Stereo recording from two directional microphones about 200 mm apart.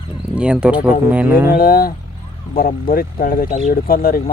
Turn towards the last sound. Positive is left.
turn(degrees=45)  # may be behind; listen again after turning